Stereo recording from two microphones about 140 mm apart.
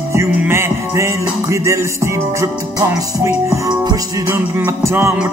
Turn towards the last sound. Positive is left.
turn(degrees=-20)  # may be behind; listen again after turning